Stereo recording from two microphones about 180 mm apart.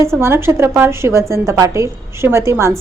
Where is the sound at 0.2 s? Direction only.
15° right (ahead or behind).